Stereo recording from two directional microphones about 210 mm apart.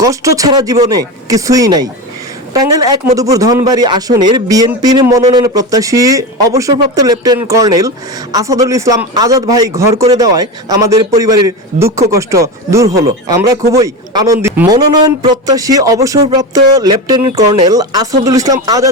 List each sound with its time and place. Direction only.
0.0 s speech: 15° right (ahead or behind)